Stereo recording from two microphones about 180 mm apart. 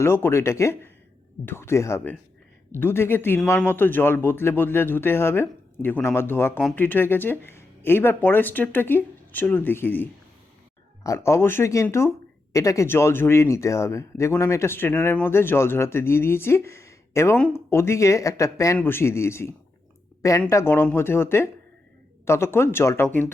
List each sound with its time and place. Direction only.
0.0 s speech: 15° left (ahead or behind)